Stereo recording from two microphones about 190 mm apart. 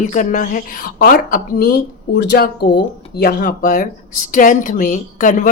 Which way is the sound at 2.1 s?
60° left (ahead or behind).